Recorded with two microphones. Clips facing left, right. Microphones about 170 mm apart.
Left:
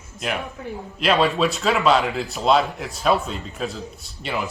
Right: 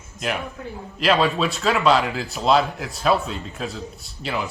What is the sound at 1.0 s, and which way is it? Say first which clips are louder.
Speech: even; centre (ahead or behind).